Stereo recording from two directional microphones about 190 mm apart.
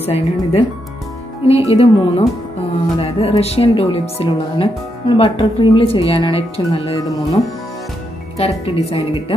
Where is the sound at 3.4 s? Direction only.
30° left (ahead or behind).